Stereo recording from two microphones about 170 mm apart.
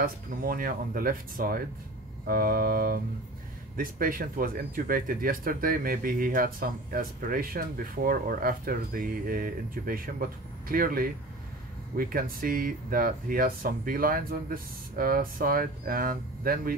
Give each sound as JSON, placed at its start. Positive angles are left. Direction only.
{"t": 0.0, "sound": "speech", "side_deg": -55}